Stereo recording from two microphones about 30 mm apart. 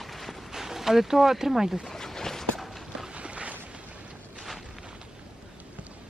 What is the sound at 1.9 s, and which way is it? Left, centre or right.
Boat, centre.